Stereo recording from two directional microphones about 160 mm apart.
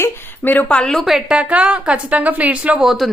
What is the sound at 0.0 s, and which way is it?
A woman's voice, 10° left (ahead or behind).